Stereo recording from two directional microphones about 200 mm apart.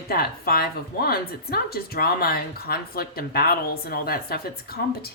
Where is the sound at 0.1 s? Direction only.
50° left (ahead or behind).